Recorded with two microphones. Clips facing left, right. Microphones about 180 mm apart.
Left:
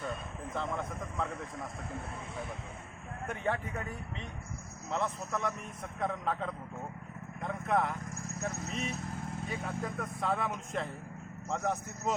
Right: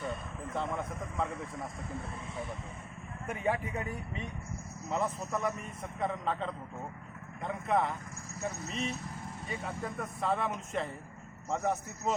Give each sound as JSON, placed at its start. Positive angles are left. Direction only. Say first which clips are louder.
{"t": 0.5, "sound": "speech", "louder": "right 1 dB", "side_deg": 0}
{"t": 3.2, "sound": "a man's voice", "louder": "right 2 dB", "side_deg": -10}